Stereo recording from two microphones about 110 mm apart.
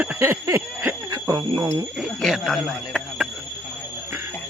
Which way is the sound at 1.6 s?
30° right (ahead or behind).